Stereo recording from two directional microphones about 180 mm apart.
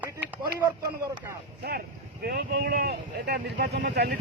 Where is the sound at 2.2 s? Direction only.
60° right (ahead or behind).